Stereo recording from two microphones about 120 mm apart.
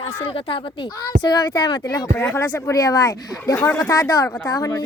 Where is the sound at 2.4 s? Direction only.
25° left (ahead or behind).